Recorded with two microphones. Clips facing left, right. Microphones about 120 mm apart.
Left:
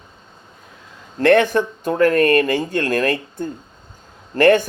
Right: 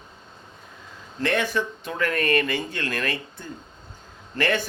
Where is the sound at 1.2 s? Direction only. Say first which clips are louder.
Left 10 dB; 55° left (ahead or behind).